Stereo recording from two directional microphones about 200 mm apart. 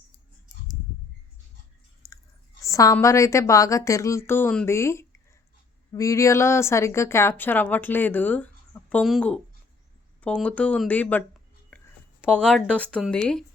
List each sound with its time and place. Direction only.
2.0 s chewing: 15° left (ahead or behind)
2.6 s a woman's voice: 15° left (ahead or behind)
11.7 s a sound: 10° left (ahead or behind)
12.2 s speech: 5° left (ahead or behind)